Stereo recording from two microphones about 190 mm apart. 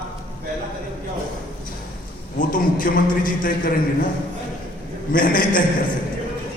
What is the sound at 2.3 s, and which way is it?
A man's voice, 45° left (ahead or behind).